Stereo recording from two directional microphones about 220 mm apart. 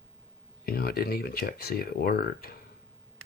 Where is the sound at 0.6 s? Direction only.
45° left (ahead or behind).